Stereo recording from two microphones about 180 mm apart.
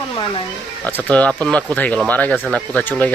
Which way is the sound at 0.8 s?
10° left (ahead or behind).